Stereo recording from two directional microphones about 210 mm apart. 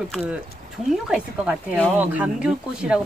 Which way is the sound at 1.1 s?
5° right (ahead or behind).